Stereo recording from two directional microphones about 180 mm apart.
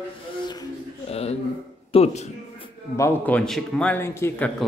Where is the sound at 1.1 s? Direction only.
35° left (ahead or behind).